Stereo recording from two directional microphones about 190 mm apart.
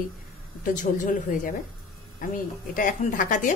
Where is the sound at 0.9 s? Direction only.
40° left (ahead or behind).